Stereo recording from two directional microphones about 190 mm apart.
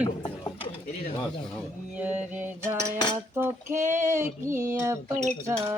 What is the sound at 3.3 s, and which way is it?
Child singing, 15° right (ahead or behind).